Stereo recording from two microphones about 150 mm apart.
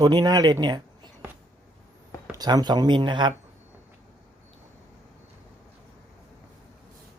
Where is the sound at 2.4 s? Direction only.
25° right (ahead or behind).